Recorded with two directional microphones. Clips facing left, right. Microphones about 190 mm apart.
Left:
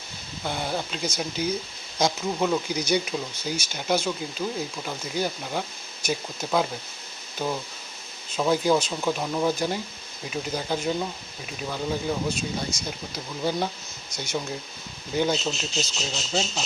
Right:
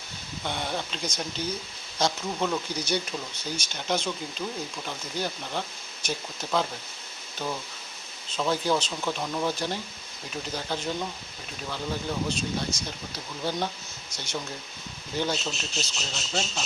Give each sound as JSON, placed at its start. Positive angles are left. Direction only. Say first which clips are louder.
{"t": 0.4, "sound": "speech", "louder": "left 3 dB", "side_deg": 5}